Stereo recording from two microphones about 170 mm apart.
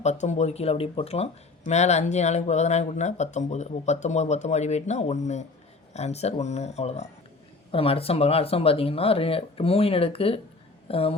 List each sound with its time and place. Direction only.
0.0 s speech: 45° left (ahead or behind)